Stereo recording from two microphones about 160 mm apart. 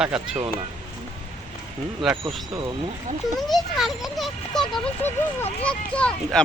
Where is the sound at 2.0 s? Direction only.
Centre (ahead or behind).